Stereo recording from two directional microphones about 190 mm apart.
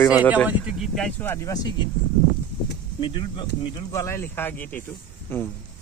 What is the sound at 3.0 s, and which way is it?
Speech, 25° left (ahead or behind).